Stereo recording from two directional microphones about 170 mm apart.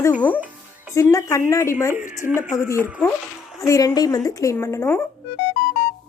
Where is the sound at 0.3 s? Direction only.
10° right (ahead or behind).